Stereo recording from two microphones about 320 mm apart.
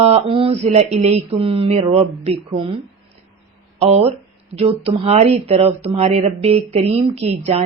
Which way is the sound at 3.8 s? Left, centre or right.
Centre.